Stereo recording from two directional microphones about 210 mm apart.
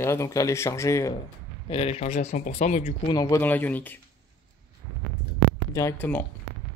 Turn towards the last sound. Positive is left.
turn(degrees=10)  # may be behind; listen again after turning